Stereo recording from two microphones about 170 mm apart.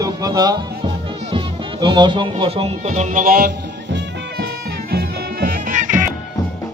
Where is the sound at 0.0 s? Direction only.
20° right (ahead or behind).